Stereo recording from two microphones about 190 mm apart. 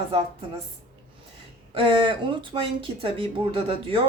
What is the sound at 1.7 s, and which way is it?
A woman's voice, 25° right (ahead or behind).